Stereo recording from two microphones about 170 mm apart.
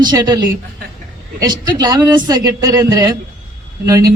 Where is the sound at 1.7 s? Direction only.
25° right (ahead or behind).